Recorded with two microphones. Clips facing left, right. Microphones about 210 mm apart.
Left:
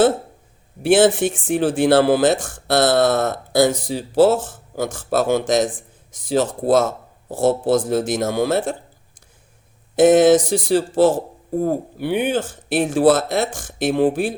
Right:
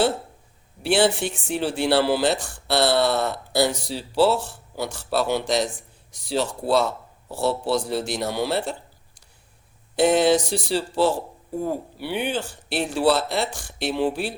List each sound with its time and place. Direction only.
0.8 s speech: 50° left (ahead or behind)
9.9 s speech: 50° left (ahead or behind)